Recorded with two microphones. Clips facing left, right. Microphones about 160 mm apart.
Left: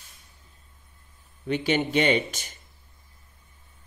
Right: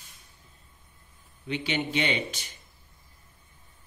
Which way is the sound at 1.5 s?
45° left (ahead or behind).